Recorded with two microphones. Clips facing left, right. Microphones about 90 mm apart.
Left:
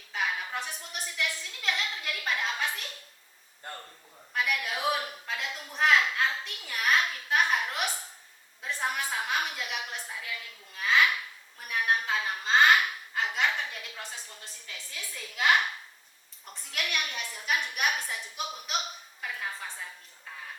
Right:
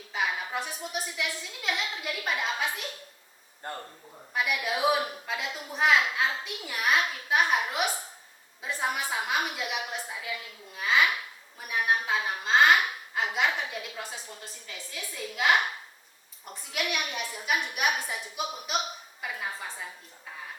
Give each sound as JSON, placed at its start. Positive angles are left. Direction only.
{"t": 0.1, "sound": "a woman's voice", "side_deg": -5}
{"t": 4.4, "sound": "a woman's voice", "side_deg": -10}